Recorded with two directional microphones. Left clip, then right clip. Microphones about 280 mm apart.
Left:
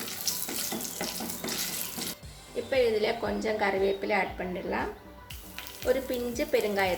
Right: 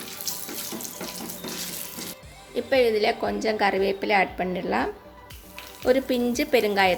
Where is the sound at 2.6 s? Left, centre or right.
Right.